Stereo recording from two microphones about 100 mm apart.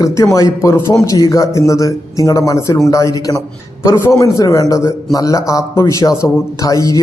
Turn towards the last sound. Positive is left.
turn(degrees=35)  # may be behind; listen again after turning